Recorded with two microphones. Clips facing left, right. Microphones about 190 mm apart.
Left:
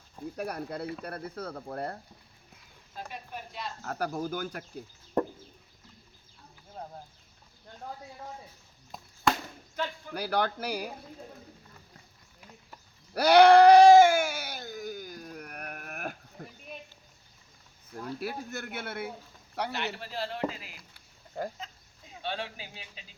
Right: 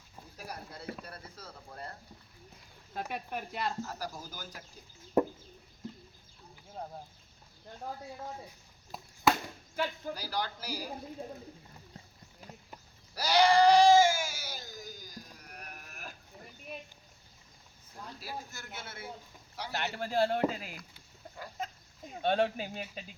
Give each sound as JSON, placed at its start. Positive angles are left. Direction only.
{"t": 0.3, "sound": "speech", "side_deg": 60}
{"t": 2.9, "sound": "speech", "side_deg": -55}
{"t": 3.8, "sound": "speech", "side_deg": 60}
{"t": 5.2, "sound": "chicken", "side_deg": -5}
{"t": 8.9, "sound": "chop", "side_deg": -5}
{"t": 9.8, "sound": "speech", "side_deg": -10}
{"t": 10.2, "sound": "speech", "side_deg": 60}
{"t": 13.1, "sound": "bleat", "side_deg": 60}
{"t": 16.4, "sound": "a sound", "side_deg": 70}
{"t": 18.2, "sound": "speech", "side_deg": 60}
{"t": 20.0, "sound": "speech", "side_deg": -50}
{"t": 22.1, "sound": "speech", "side_deg": -50}